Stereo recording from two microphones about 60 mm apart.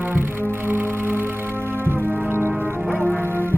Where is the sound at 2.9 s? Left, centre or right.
Left.